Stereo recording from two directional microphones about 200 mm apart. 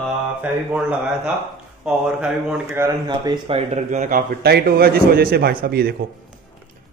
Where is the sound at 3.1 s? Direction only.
25° right (ahead or behind).